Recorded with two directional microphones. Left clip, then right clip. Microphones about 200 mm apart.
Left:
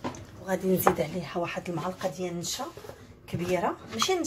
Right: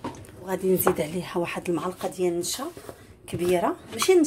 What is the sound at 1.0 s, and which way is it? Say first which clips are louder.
A woman's voice: right 2 dB; 30° right (ahead or behind).